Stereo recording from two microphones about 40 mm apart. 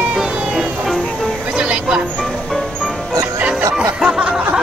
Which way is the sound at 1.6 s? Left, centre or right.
Right.